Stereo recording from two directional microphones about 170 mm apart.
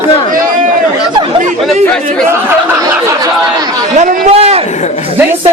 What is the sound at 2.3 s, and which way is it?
Speech, 20° right (ahead or behind).